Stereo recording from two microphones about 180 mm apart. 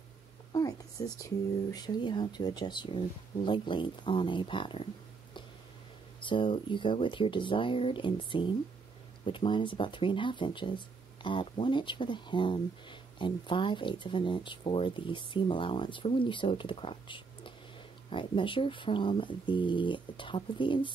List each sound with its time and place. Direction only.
0.5 s a sound: 20° left (ahead or behind)
1.7 s speech: 25° left (ahead or behind)
6.2 s speech: 25° left (ahead or behind)